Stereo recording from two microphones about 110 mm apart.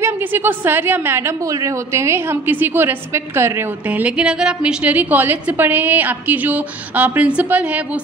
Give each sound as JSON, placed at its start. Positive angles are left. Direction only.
{"t": 0.0, "sound": "a woman's voice", "side_deg": -20}